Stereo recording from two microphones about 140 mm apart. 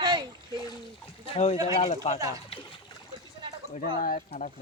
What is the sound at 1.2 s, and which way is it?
Speech, 45° left (ahead or behind).